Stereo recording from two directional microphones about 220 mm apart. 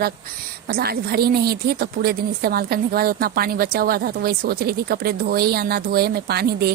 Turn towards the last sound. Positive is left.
turn(degrees=-45)  # may be behind; listen again after turning